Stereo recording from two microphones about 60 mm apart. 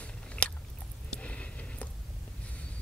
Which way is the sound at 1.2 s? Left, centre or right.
Left.